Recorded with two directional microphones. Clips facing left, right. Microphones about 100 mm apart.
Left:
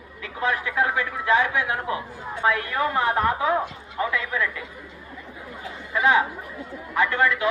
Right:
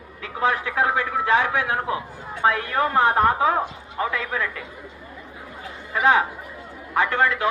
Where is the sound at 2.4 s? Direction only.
35° right (ahead or behind).